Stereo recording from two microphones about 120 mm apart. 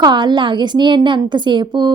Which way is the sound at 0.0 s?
40° right (ahead or behind).